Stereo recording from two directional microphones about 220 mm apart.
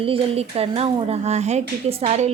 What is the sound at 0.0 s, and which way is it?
Speech, 25° right (ahead or behind).